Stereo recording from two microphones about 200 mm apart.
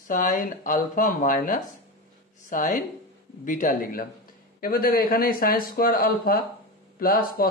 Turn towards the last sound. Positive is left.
turn(degrees=45)  # may be behind; listen again after turning